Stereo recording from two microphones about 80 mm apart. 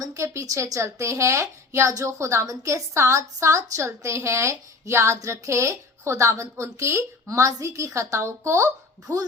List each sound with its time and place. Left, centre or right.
0.0 s a woman's voice: right